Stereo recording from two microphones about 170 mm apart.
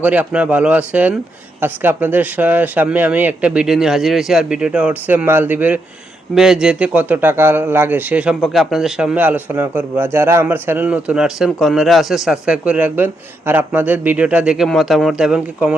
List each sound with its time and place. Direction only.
0.0 s speech: 10° right (ahead or behind)